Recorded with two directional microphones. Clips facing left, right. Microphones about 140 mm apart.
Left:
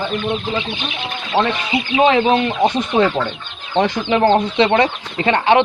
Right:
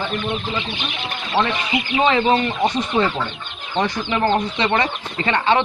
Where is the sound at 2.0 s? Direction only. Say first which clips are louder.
Left 3 dB; 60° left (ahead or behind).